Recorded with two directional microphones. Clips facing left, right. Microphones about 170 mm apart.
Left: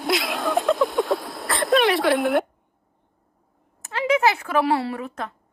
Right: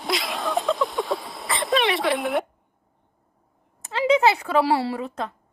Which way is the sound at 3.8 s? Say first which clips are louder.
Right 2 dB; 30° right (ahead or behind).